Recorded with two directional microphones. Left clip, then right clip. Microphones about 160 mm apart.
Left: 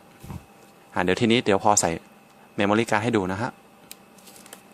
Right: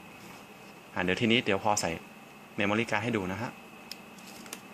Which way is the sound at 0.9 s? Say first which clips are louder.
Left 6 dB; 55° left (ahead or behind).